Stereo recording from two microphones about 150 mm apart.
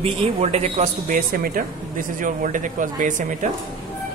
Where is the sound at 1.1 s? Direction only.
70° right (ahead or behind).